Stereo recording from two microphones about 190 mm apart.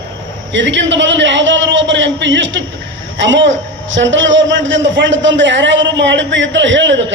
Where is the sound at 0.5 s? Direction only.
75° right (ahead or behind).